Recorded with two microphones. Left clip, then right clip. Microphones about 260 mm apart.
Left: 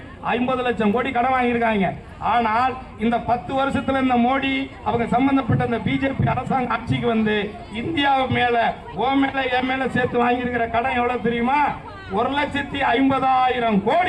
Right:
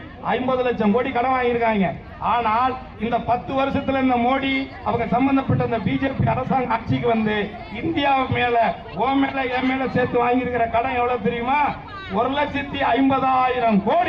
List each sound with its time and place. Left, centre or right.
0.3 s a man's voice: left